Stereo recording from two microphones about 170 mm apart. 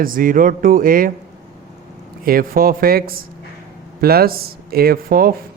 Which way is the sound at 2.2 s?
60° right (ahead or behind).